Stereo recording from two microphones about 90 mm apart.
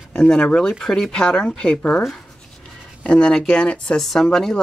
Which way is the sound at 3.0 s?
10° left (ahead or behind).